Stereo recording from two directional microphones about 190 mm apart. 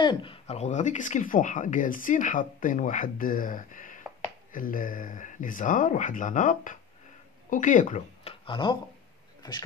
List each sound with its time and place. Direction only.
0.0 s speech: 25° left (ahead or behind)